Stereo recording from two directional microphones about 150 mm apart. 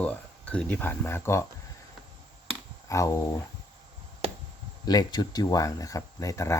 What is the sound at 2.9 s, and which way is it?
Speech, 20° left (ahead or behind).